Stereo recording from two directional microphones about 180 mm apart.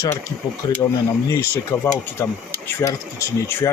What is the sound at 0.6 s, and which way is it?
Speech, 25° left (ahead or behind).